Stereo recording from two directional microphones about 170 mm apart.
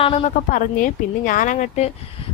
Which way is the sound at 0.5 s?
50° left (ahead or behind).